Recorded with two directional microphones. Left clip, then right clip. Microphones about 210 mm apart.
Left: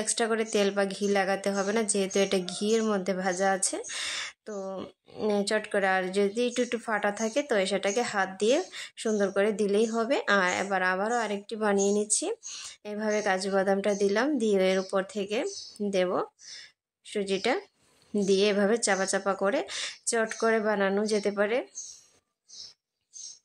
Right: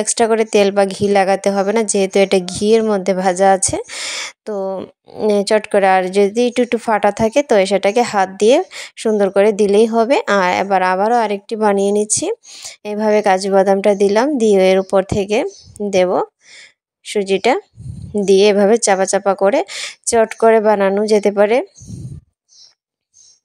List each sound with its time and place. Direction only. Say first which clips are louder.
0.0 s a woman's voice: right 14 dB; 35° right (ahead or behind)